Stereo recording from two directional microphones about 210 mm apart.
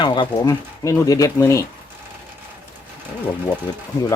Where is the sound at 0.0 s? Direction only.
20° left (ahead or behind).